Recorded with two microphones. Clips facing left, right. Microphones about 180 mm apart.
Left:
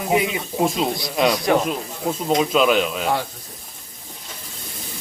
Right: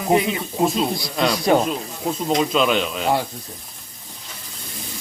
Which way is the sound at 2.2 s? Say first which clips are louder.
Left 1 dB; 5° left (ahead or behind).